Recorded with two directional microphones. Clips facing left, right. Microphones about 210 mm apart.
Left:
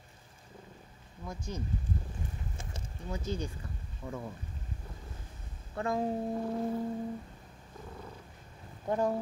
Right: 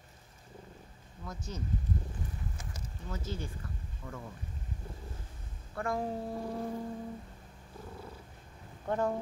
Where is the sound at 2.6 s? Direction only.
25° left (ahead or behind).